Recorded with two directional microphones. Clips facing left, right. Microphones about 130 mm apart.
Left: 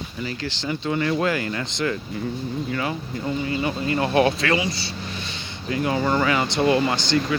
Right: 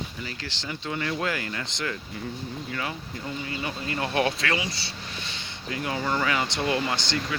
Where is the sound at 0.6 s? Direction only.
30° left (ahead or behind).